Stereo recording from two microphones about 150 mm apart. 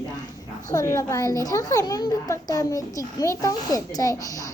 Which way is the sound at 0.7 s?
20° left (ahead or behind).